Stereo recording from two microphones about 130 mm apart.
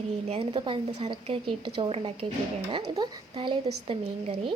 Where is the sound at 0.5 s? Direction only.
40° right (ahead or behind).